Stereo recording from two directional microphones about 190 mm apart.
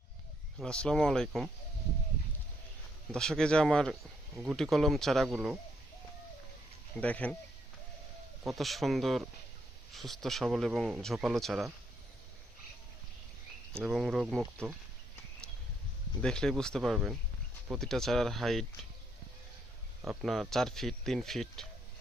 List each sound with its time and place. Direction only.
0.6 s speech: 5° left (ahead or behind)
3.1 s speech: centre (ahead or behind)
6.9 s speech: 5° left (ahead or behind)
8.4 s speech: centre (ahead or behind)
13.7 s speech: centre (ahead or behind)
16.2 s speech: 5° left (ahead or behind)
20.0 s speech: centre (ahead or behind)